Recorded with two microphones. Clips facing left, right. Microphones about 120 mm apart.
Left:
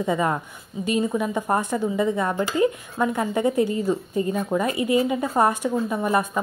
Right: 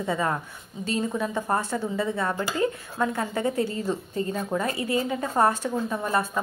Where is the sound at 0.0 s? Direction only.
15° left (ahead or behind).